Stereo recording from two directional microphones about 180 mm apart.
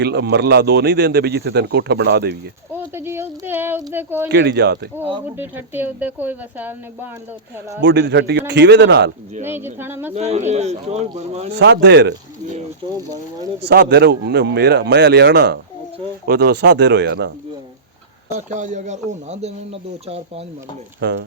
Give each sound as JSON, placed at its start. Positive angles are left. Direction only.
{"t": 0.0, "sound": "speech", "side_deg": -70}
{"t": 2.7, "sound": "speech", "side_deg": -10}
{"t": 4.3, "sound": "speech", "side_deg": -70}
{"t": 5.4, "sound": "speech", "side_deg": -10}
{"t": 7.8, "sound": "speech", "side_deg": -80}
{"t": 9.4, "sound": "speech", "side_deg": -10}
{"t": 10.2, "sound": "speech", "side_deg": -40}
{"t": 11.6, "sound": "speech", "side_deg": -70}
{"t": 13.6, "sound": "speech", "side_deg": -65}
{"t": 18.3, "sound": "speech", "side_deg": -45}
{"t": 21.0, "sound": "speech", "side_deg": -70}